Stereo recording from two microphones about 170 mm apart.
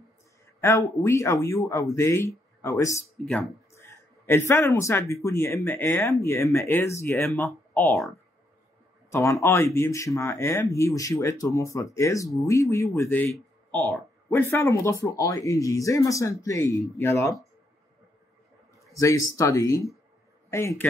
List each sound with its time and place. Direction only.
0.6 s speech: 15° left (ahead or behind)
9.1 s speech: 15° left (ahead or behind)
18.9 s speech: 15° left (ahead or behind)